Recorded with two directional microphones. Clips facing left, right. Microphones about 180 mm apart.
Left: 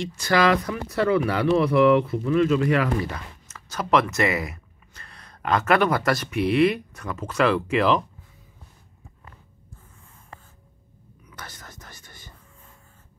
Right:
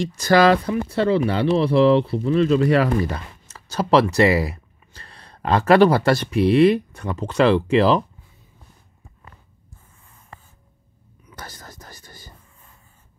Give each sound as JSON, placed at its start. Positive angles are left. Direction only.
{"t": 0.0, "sound": "speech", "side_deg": -40}
{"t": 11.2, "sound": "whispering", "side_deg": -35}